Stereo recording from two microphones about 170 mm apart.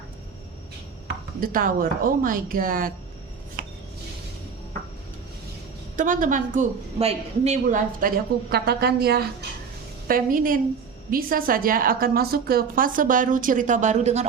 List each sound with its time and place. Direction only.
1.4 s a woman's voice: 55° right (ahead or behind)
6.0 s a woman's voice: 50° right (ahead or behind); by 9.2 s 70° right (ahead or behind)
10.1 s a woman's voice: 55° right (ahead or behind)